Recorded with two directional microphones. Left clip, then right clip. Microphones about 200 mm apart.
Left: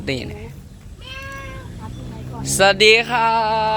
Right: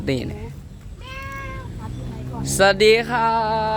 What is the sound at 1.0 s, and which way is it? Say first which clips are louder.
Cat: left 1 dB; 25° right (ahead or behind).